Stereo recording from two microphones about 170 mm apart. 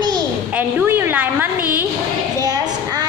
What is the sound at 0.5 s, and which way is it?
A woman's voice, 10° right (ahead or behind).